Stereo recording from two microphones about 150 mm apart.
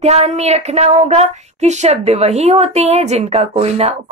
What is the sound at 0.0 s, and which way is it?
Speech, 45° right (ahead or behind).